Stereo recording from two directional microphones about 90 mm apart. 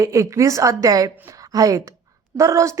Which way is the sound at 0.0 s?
35° right (ahead or behind).